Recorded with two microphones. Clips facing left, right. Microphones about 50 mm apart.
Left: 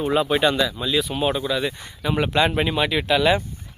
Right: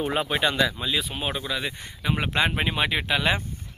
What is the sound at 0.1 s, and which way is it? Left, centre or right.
Speech, right.